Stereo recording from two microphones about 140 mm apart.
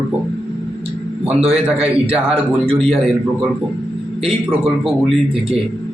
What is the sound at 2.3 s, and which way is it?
Speech, 40° right (ahead or behind).